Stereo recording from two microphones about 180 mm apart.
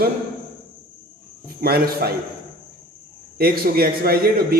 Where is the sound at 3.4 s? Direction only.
60° right (ahead or behind).